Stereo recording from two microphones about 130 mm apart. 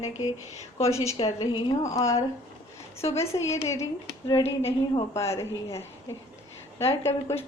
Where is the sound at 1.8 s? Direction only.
25° left (ahead or behind).